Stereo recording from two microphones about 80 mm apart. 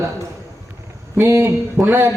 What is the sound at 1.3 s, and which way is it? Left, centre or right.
Speech, right.